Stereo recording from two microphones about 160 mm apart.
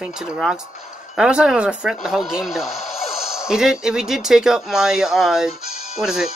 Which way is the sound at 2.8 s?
40° left (ahead or behind).